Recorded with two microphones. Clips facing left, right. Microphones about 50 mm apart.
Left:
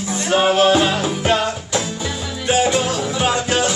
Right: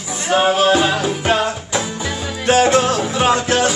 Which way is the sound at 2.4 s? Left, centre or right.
Right.